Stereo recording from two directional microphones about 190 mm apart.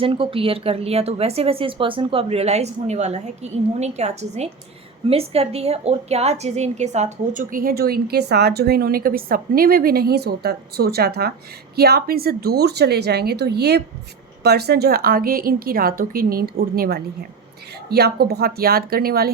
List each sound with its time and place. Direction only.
0.0 s a woman's voice: 30° right (ahead or behind); by 19.3 s 50° right (ahead or behind)